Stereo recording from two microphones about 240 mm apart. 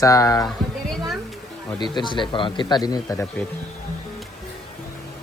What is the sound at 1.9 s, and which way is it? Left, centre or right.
Speech, centre.